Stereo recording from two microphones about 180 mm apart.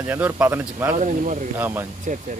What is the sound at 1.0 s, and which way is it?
Speech, 45° right (ahead or behind).